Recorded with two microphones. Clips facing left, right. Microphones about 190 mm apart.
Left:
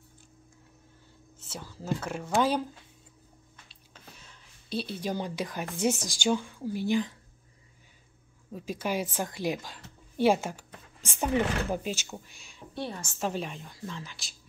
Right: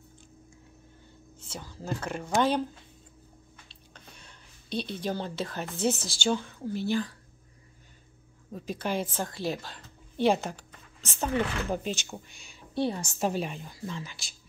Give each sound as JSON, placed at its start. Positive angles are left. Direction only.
{"t": 1.4, "sound": "a woman's voice", "side_deg": 5}
{"t": 3.9, "sound": "speech", "side_deg": 5}
{"t": 8.5, "sound": "a woman's voice", "side_deg": 10}
{"t": 12.8, "sound": "a woman's voice", "side_deg": -15}